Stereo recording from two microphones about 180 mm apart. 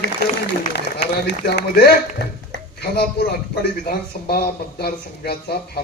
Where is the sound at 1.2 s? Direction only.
70° left (ahead or behind).